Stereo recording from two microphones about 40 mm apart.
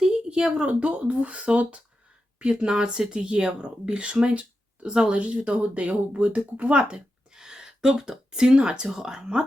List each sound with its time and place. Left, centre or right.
0.0 s speech: centre
7.3 s a sound: centre
8.3 s speech: right